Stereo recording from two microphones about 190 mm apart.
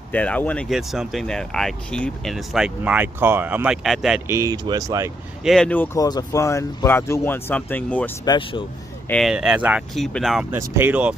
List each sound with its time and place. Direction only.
0.1 s speech: 5° left (ahead or behind)
4.3 s speech: 15° right (ahead or behind)
5.4 s speech: centre (ahead or behind)
8.3 s speech: 25° left (ahead or behind)
9.1 s speech: centre (ahead or behind)